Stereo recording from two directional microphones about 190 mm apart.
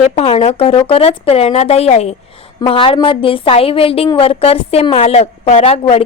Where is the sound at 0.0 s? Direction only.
30° left (ahead or behind).